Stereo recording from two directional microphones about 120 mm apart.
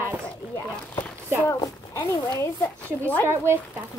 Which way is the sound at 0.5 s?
15° left (ahead or behind).